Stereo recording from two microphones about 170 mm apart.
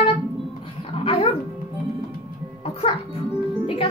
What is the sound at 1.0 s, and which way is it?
Speech, 35° left (ahead or behind).